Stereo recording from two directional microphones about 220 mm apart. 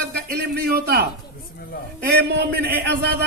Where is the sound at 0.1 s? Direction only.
45° right (ahead or behind).